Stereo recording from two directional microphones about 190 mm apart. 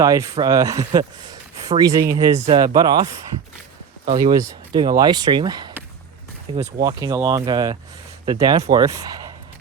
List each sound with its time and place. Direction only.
0.0 s speech: 15° right (ahead or behind)
4.2 s speech: 20° right (ahead or behind)
6.7 s speech: 20° right (ahead or behind)